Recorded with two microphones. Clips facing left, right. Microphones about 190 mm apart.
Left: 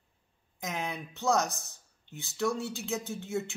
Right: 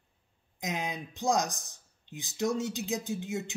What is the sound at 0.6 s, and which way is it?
Speech, 15° right (ahead or behind).